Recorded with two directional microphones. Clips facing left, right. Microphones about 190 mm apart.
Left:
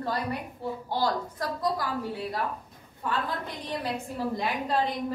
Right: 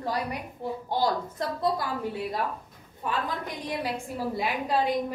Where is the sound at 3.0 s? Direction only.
15° right (ahead or behind).